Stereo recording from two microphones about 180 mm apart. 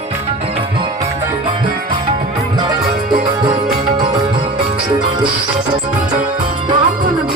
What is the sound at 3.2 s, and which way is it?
Music, 25° right (ahead or behind).